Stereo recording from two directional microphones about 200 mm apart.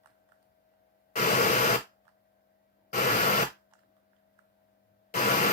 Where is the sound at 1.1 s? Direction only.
40° left (ahead or behind).